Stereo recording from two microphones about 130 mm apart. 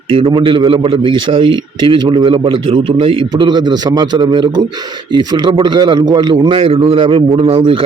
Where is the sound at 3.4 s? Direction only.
35° right (ahead or behind).